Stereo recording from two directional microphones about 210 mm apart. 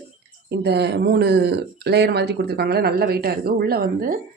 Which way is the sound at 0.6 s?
50° right (ahead or behind).